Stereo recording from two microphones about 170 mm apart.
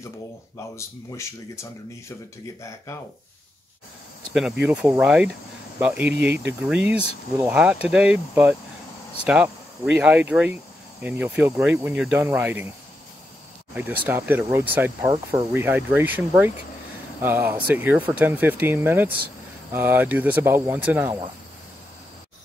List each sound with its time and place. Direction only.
0.7 s speech: 15° left (ahead or behind)
4.3 s speech: 5° right (ahead or behind)
13.7 s speech: 10° right (ahead or behind)